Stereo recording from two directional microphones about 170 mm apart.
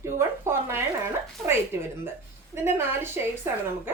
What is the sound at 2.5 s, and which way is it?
Speech, 15° right (ahead or behind).